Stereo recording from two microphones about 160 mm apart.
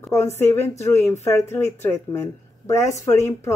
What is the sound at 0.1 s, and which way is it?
Speech, 15° left (ahead or behind).